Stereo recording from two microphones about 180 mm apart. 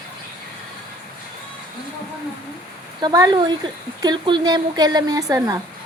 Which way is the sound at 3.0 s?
20° right (ahead or behind).